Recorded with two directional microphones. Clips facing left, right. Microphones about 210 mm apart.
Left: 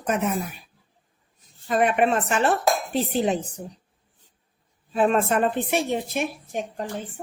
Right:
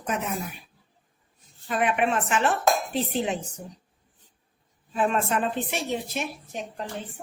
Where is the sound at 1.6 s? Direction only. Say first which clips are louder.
Left 4 dB; 40° left (ahead or behind).